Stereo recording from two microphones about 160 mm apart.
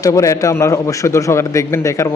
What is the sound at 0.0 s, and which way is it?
A man's voice, 20° left (ahead or behind).